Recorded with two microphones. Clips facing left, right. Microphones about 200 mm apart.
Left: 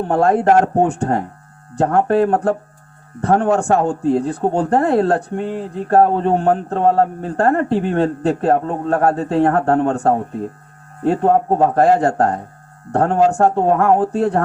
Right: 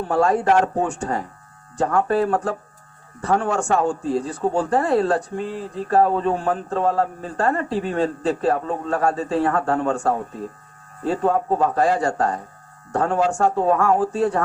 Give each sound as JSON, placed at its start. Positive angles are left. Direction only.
{"t": 0.1, "sound": "speech", "side_deg": 60}